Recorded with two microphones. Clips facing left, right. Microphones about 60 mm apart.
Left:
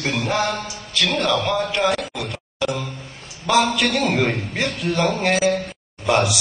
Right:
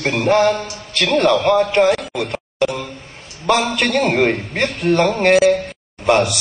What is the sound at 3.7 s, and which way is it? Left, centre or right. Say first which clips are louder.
A man's voice: right 3 dB; right.